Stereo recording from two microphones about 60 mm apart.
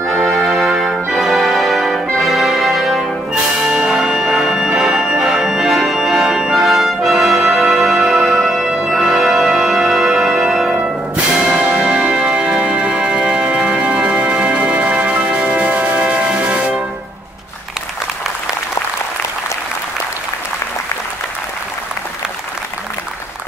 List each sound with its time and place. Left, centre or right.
0.0 s music: right
0.3 s music: centre
11.3 s music: centre